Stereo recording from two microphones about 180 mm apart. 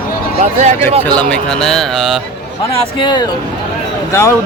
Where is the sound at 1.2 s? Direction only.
5° left (ahead or behind).